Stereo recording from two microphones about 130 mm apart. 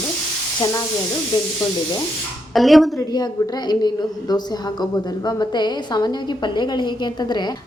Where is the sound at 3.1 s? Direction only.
30° left (ahead or behind).